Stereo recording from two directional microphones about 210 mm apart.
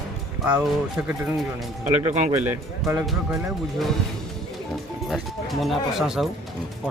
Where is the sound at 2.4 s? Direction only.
10° right (ahead or behind).